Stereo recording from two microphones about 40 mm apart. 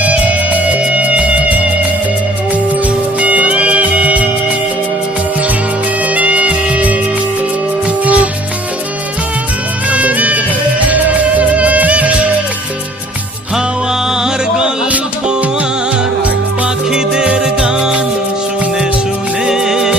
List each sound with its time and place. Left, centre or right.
0.0 s music: right
3.2 s music: right
6.1 s music: right
8.0 s music: right
9.9 s music: right
17.2 s music: centre
19.5 s music: centre